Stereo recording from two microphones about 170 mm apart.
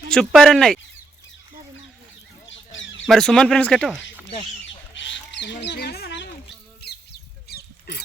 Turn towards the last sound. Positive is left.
turn(degrees=70)  # may be behind; listen again after turning